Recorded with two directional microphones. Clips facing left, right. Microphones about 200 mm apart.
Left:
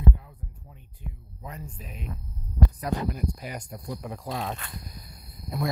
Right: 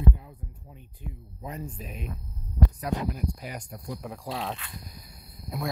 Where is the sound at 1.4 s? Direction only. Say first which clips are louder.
Right 4 dB; 20° right (ahead or behind).